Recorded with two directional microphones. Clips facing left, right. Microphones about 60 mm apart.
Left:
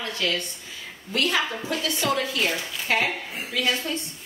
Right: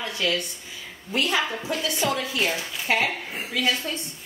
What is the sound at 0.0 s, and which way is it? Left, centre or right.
A woman's voice, centre.